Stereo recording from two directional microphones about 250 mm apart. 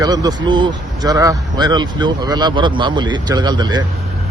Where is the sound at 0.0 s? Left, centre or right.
Centre.